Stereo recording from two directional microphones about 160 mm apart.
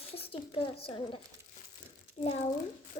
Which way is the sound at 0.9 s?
35° left (ahead or behind).